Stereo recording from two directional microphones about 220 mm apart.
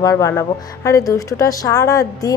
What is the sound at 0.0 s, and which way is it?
A woman's voice, 15° left (ahead or behind).